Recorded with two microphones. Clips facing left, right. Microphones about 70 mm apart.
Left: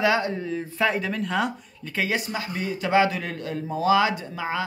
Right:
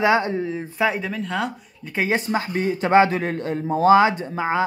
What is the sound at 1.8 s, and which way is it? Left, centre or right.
Speech, right.